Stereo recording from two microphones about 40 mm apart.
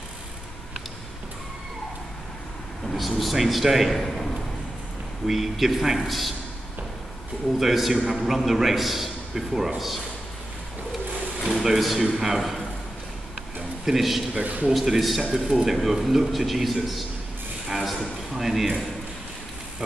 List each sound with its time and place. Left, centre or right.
2.9 s a man's voice: centre
3.9 s a man's voice: centre
5.2 s a man's voice: centre
7.5 s a man's voice: centre
11.6 s a man's voice: centre
12.4 s a man's voice: centre
13.6 s a sound: centre
14.3 s a man's voice: right
14.7 s a man's voice: centre